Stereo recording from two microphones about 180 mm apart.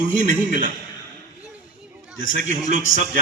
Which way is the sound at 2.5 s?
45° right (ahead or behind).